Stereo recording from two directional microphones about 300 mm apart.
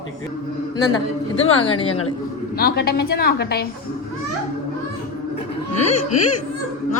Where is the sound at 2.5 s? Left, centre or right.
Left.